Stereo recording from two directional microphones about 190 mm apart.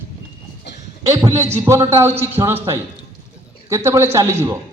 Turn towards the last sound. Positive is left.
turn(degrees=-15)  # may be behind; listen again after turning